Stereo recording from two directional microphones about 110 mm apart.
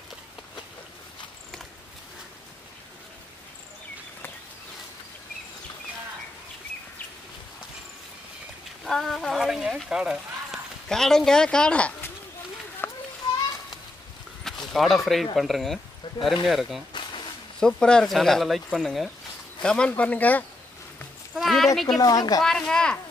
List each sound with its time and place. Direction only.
8.8 s speech: centre (ahead or behind)
10.9 s speech: 5° left (ahead or behind)
12.8 s children playing: 20° left (ahead or behind)
14.7 s speech: centre (ahead or behind)
21.4 s a sound: centre (ahead or behind)
21.7 s speech: 5° left (ahead or behind)
22.0 s speech: 35° left (ahead or behind)
22.4 s speech: 5° left (ahead or behind)